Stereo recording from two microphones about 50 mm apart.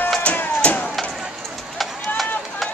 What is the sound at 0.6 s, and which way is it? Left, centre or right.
Vehicle, left.